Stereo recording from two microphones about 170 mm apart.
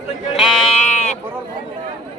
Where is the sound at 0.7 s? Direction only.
40° left (ahead or behind).